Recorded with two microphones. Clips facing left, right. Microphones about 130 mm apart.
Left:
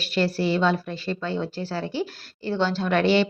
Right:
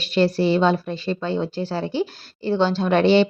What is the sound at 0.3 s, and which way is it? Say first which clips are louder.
A woman's voice: right 4 dB; 25° right (ahead or behind).